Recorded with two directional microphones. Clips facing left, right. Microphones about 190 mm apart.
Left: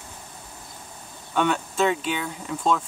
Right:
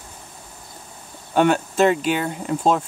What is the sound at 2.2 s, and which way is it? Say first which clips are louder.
Speech: right 7 dB; 50° right (ahead or behind).